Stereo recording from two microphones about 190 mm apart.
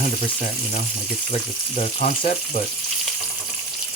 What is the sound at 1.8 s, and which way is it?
Frying, 40° left (ahead or behind).